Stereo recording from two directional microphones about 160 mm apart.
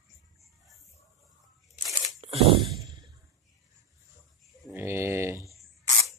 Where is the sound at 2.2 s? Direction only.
35° right (ahead or behind).